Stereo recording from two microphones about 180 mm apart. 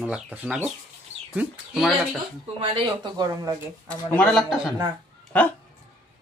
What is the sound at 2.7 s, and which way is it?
Speech, 25° right (ahead or behind).